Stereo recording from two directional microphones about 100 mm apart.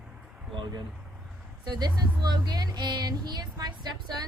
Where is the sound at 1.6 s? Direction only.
45° right (ahead or behind).